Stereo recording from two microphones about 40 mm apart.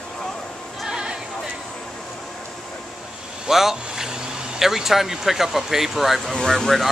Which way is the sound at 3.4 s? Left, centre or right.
Centre.